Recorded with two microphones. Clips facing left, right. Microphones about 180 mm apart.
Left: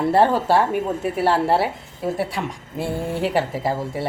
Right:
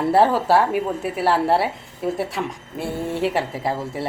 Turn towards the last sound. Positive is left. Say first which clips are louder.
# left 1 dB
turn(degrees=0)  # may be behind; listen again after turning